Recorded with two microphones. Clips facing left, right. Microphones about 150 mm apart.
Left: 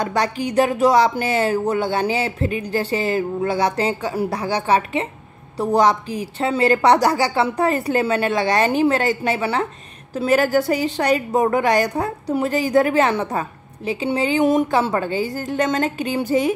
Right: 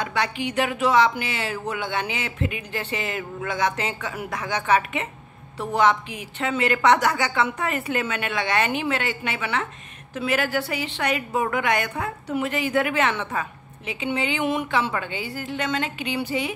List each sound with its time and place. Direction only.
0.0 s a woman's voice: 40° left (ahead or behind)